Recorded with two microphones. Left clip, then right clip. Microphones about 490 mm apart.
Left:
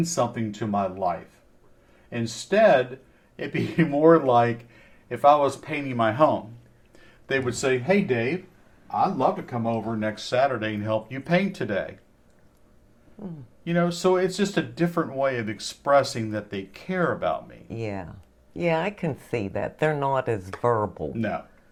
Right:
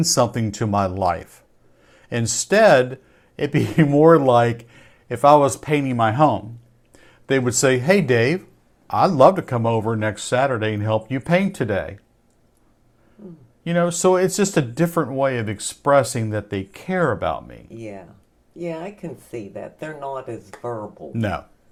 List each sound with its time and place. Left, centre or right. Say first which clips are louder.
0.1 s speech: right 6 dB; right
13.7 s speech: right 5 dB; right
17.7 s speech: left 7 dB; left